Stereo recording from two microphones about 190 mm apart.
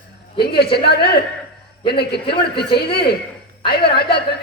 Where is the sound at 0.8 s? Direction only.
60° left (ahead or behind).